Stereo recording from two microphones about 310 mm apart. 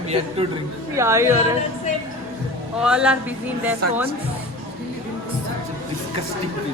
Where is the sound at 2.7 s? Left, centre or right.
Centre.